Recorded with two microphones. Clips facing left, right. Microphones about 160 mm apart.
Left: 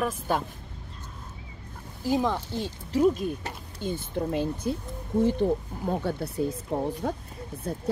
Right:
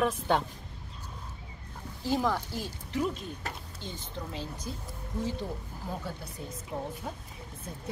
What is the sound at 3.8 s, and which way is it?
Speech, 55° left (ahead or behind).